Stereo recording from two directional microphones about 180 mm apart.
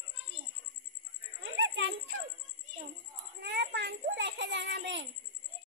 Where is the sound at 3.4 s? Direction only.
65° right (ahead or behind); by 5.1 s 90° right.